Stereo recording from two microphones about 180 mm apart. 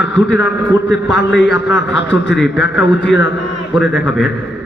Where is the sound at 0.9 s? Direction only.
75° left (ahead or behind).